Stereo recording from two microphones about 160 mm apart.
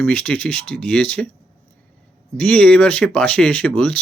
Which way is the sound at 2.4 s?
5° left (ahead or behind).